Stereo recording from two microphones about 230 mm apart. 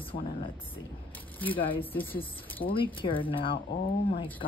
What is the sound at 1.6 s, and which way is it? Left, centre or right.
Speech, left.